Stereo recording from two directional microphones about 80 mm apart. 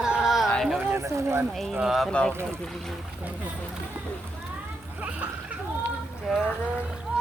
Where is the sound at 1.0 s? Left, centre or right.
Right.